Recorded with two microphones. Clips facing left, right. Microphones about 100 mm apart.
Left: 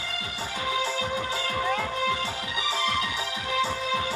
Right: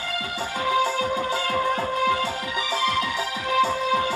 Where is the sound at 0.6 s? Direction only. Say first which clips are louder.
Right 6 dB; 40° right (ahead or behind).